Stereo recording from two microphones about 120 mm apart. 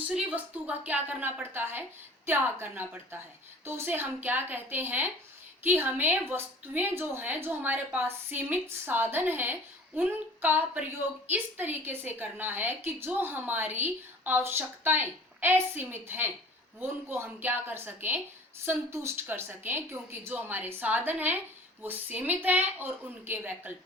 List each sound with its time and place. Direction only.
0.1 s a woman's voice: 10° right (ahead or behind)